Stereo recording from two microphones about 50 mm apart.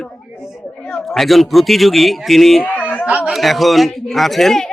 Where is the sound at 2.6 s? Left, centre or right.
Left.